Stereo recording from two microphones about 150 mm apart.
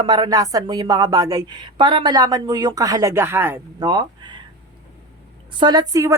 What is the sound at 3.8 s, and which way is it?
Speech, 30° right (ahead or behind).